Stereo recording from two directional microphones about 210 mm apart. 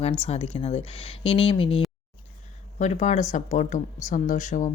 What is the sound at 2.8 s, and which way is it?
Speech, 35° left (ahead or behind).